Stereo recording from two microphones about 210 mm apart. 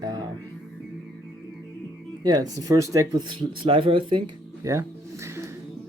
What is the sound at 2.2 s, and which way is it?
Speech, 20° right (ahead or behind).